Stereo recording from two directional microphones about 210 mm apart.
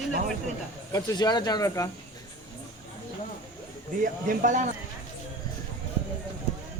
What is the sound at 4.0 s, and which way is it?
Speech, 40° right (ahead or behind).